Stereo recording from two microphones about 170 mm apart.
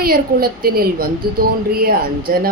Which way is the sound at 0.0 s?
60° right (ahead or behind).